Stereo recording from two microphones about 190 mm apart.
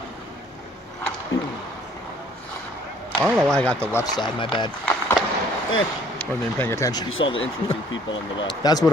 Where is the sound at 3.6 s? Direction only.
5° left (ahead or behind).